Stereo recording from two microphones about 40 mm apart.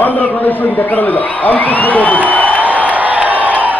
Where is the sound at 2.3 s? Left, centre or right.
Left.